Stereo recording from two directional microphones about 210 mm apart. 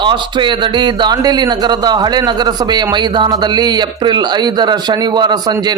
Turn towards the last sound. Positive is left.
turn(degrees=-20)  # may be behind; listen again after turning